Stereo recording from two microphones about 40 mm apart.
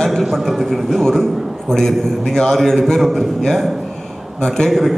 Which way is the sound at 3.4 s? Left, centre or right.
Centre.